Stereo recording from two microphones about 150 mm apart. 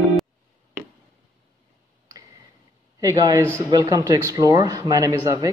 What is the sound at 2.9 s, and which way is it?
Speech, 25° right (ahead or behind).